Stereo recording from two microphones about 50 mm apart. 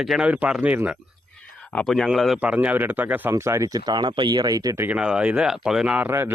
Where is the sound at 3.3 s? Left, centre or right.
Right.